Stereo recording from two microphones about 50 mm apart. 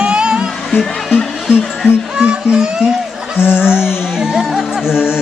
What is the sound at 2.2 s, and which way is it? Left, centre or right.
Speech, centre.